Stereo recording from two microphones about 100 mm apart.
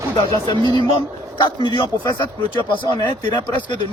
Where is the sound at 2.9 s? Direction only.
40° left (ahead or behind).